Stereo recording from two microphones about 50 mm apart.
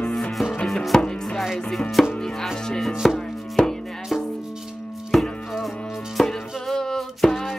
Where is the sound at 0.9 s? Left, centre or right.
Centre.